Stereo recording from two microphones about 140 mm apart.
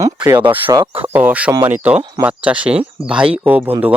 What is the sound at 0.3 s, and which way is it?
Speech, 10° right (ahead or behind).